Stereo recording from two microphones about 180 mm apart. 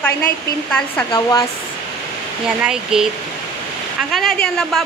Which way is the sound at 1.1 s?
20° left (ahead or behind).